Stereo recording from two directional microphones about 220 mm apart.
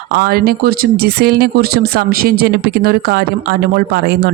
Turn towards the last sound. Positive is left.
turn(degrees=-45)  # may be behind; listen again after turning